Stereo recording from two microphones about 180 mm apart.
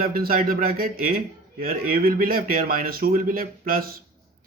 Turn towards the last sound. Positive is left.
turn(degrees=-55)  # may be behind; listen again after turning